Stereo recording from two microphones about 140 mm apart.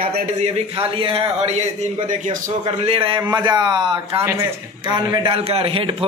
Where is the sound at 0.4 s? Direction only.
40° right (ahead or behind).